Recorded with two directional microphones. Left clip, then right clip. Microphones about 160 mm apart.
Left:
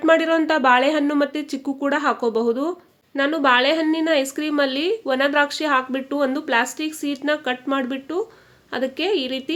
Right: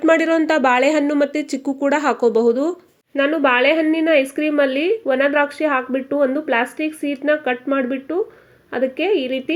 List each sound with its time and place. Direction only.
0.0 s speech: 15° right (ahead or behind)
3.2 s speech: 5° right (ahead or behind)